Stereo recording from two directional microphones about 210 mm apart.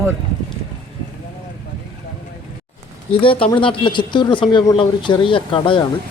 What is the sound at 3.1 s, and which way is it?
Speech, 25° left (ahead or behind).